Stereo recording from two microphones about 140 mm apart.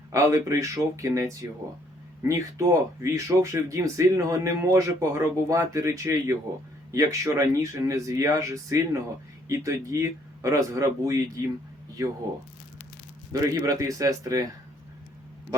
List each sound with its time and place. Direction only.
0.1 s speech: 20° right (ahead or behind)
13.5 s speech: 25° right (ahead or behind)